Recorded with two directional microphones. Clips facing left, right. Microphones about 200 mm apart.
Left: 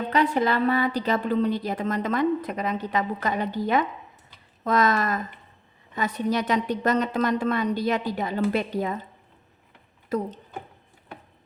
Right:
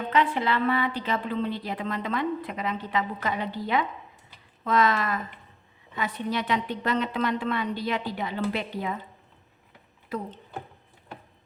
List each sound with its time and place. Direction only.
0.1 s a woman's voice: 40° left (ahead or behind)
10.1 s a woman's voice: 40° left (ahead or behind)